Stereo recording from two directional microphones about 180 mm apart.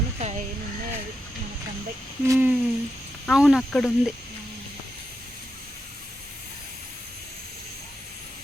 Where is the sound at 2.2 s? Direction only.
10° right (ahead or behind).